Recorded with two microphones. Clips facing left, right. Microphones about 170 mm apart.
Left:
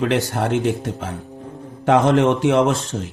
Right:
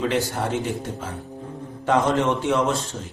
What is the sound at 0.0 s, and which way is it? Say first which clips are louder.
Speech: left 4 dB; 65° left (ahead or behind).